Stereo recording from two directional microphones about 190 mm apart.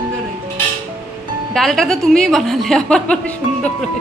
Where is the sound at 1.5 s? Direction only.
Centre (ahead or behind).